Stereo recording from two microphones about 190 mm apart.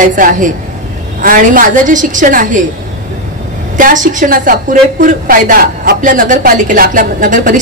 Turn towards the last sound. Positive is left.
turn(degrees=-45)  # may be behind; listen again after turning